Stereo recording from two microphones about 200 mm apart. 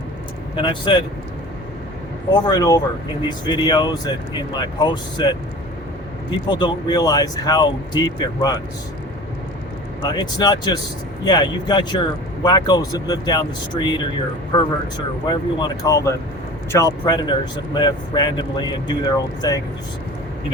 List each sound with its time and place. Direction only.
0.5 s speech: 25° left (ahead or behind)
2.3 s speech: 20° left (ahead or behind)
6.5 s speech: 20° left (ahead or behind)
10.1 s speech: 20° left (ahead or behind)
15.3 s speech: 20° left (ahead or behind)